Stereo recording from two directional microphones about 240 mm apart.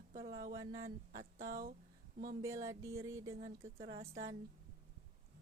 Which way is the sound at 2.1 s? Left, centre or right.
Right.